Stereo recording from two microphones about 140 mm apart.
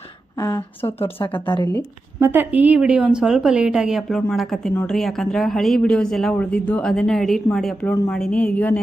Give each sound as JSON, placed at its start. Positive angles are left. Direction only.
{"t": 0.3, "sound": "a woman's voice", "side_deg": 25}
{"t": 0.8, "sound": "speech", "side_deg": 45}
{"t": 2.1, "sound": "a woman's voice", "side_deg": -15}